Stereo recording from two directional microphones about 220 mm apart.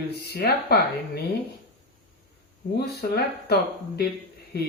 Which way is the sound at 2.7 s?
45° left (ahead or behind).